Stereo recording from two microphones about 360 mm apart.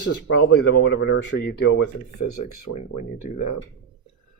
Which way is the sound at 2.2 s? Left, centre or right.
Left.